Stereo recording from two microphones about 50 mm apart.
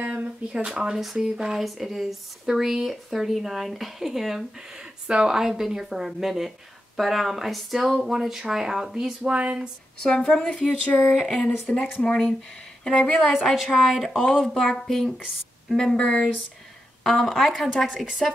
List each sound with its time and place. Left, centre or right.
0.0 s a sound: right
0.7 s speech: centre
4.6 s speech: centre
9.2 s speech: right
10.0 s a woman's voice: centre
11.1 s speech: centre
11.3 s a woman's voice: centre
13.3 s speech: centre
14.4 s a woman's voice: centre
17.0 s speech: centre